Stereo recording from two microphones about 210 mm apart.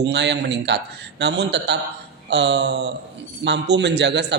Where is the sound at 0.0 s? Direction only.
55° right (ahead or behind).